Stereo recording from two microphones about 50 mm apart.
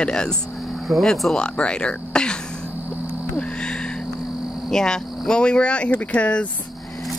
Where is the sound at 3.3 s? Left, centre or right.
Centre.